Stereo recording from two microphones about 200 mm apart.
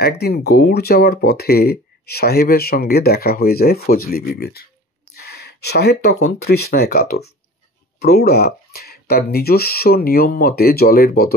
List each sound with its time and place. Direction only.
0.2 s speech: 55° left (ahead or behind)